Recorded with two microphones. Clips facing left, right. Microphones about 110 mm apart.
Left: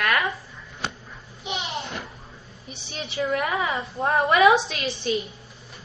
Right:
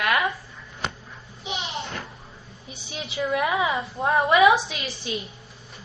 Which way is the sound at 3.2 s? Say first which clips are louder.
Right 1 dB; 5° right (ahead or behind).